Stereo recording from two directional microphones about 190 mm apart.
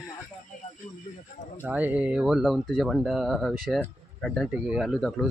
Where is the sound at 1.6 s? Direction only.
10° right (ahead or behind).